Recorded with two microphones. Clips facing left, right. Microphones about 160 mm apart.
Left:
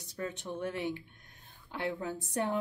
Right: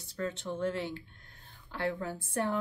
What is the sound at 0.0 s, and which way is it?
A woman's voice, 15° left (ahead or behind).